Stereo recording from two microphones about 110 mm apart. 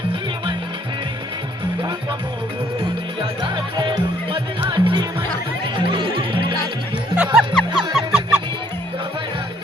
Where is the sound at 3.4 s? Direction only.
45° right (ahead or behind).